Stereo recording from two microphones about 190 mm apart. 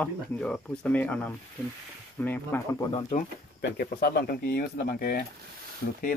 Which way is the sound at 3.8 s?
55° left (ahead or behind).